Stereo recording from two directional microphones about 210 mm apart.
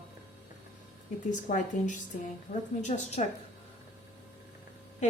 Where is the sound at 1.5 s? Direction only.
35° left (ahead or behind).